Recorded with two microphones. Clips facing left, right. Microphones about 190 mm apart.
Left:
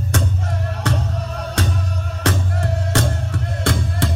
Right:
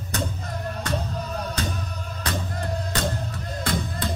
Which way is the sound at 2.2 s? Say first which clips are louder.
Left 7 dB; 75° left (ahead or behind).